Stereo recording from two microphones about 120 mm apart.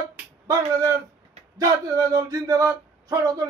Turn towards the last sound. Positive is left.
turn(degrees=-30)  # may be behind; listen again after turning